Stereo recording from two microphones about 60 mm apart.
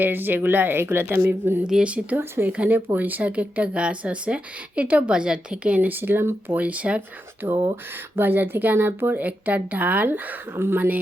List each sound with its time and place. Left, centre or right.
0.0 s speech: right
1.6 s speech: centre
6.0 s speech: right
6.6 s speech: right
7.4 s speech: right
8.1 s speech: right
10.5 s speech: right